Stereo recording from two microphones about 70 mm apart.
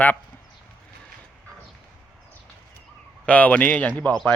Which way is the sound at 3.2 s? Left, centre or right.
Left.